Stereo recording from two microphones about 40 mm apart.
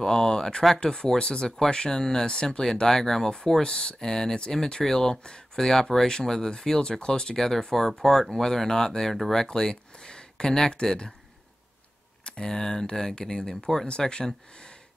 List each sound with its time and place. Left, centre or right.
0.0 s speech: centre
9.5 s speech: centre
12.3 s speech: centre